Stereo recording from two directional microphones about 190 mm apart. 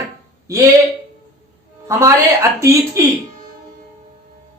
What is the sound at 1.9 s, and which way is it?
Speech, 15° right (ahead or behind).